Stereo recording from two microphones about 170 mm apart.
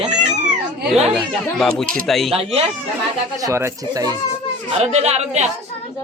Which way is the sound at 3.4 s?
20° right (ahead or behind).